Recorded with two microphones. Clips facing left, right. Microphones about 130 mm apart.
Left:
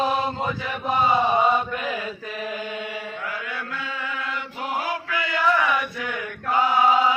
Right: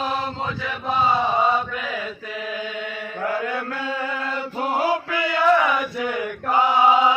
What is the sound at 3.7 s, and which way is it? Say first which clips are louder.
Chant: right 5 dB; 40° right (ahead or behind).